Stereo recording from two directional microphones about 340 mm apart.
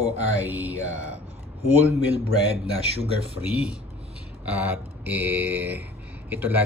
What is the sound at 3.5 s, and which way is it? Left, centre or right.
Speech, centre.